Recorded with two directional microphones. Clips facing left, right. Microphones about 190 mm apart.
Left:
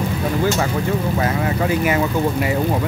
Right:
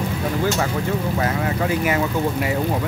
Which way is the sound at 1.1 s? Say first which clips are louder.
Left 2 dB; 20° left (ahead or behind).